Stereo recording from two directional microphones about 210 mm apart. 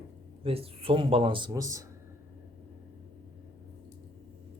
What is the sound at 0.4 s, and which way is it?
Speech, 25° right (ahead or behind).